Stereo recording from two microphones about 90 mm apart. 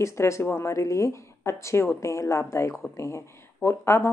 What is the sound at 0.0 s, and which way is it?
Speech, 30° left (ahead or behind).